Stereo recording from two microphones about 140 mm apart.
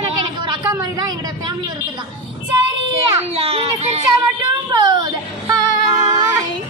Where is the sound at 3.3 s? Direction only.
45° right (ahead or behind).